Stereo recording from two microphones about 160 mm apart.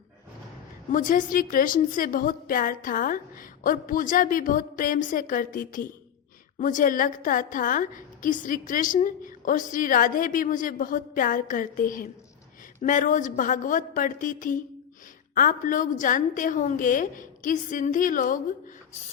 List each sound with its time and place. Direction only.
0.9 s a woman's voice: 60° left (ahead or behind)